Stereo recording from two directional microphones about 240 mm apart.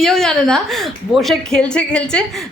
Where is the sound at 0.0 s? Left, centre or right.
Centre.